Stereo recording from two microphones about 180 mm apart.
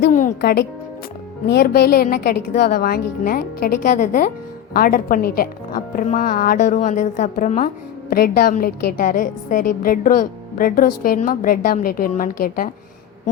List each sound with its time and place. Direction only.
0.0 s music: 45° left (ahead or behind)
1.5 s a woman's voice: 60° left (ahead or behind); by 7.7 s 45° left (ahead or behind)
8.1 s a woman's voice: 55° left (ahead or behind)